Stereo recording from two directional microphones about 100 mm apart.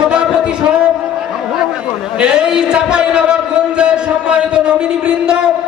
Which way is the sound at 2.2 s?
10° right (ahead or behind).